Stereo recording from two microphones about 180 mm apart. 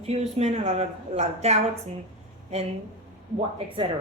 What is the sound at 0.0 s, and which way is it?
A woman's voice, 35° right (ahead or behind).